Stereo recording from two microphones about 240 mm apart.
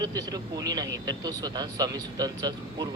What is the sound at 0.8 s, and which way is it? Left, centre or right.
Speech, right.